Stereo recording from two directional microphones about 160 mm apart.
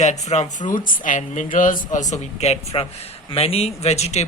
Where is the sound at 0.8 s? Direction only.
55° left (ahead or behind).